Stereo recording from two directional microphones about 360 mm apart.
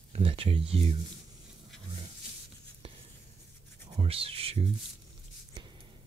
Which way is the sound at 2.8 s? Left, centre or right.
Centre.